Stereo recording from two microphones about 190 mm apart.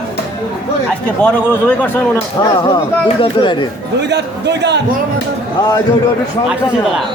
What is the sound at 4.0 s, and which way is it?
Speech, 65° right (ahead or behind).